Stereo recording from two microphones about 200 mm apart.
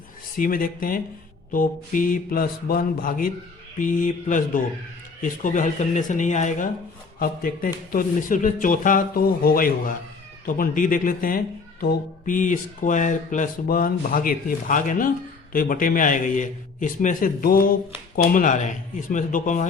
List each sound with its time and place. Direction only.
0.3 s speech: 45° left (ahead or behind)